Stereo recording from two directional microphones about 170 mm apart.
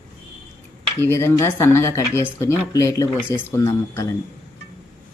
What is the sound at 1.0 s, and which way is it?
Speech, 15° left (ahead or behind).